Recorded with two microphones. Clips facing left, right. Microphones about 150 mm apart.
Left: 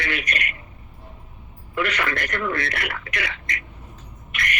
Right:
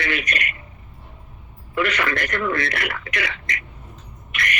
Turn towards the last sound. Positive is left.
turn(degrees=-90)